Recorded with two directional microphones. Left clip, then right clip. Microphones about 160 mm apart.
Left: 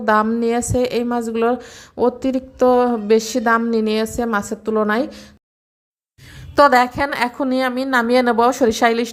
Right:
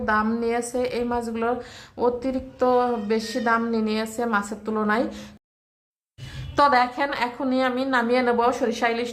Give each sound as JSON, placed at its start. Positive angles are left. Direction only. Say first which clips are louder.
{"t": 0.0, "sound": "a woman's voice", "louder": "left 7 dB", "side_deg": 40}
{"t": 6.3, "sound": "a woman's voice", "louder": "left 6 dB", "side_deg": 35}